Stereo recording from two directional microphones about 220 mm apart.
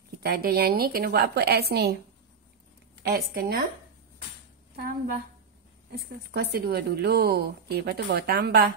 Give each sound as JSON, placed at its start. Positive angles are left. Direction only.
{"t": 0.2, "sound": "speech", "side_deg": -45}
{"t": 3.0, "sound": "speech", "side_deg": -45}
{"t": 5.9, "sound": "speech", "side_deg": -45}